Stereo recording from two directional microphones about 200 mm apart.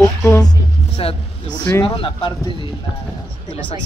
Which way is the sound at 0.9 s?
30° left (ahead or behind).